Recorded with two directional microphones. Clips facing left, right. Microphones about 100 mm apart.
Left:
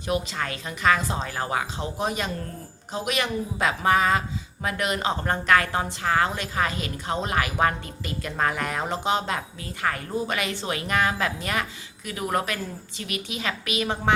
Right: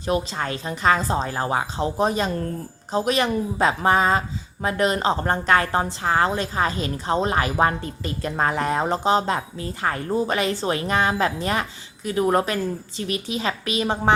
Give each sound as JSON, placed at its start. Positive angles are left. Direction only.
{"t": 0.0, "sound": "a woman's voice", "side_deg": -35}